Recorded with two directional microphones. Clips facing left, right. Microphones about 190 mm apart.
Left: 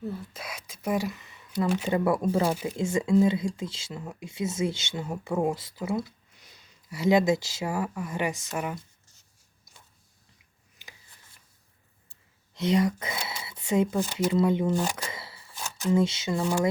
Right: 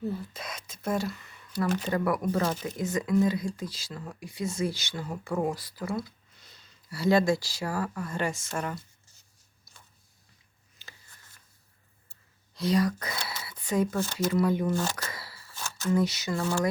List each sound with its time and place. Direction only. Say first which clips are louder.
0.0 s speech: right 2 dB; centre (ahead or behind)
1.9 s speech: left 3 dB; 25° left (ahead or behind)
2.4 s speech: left 3 dB; 10° left (ahead or behind)
2.7 s speech: left 3 dB; 25° left (ahead or behind)
10.8 s a sound: left 1 dB; 15° left (ahead or behind)
12.5 s speech: left 2 dB; 25° left (ahead or behind)
15.1 s a sound: left 2 dB; 25° left (ahead or behind)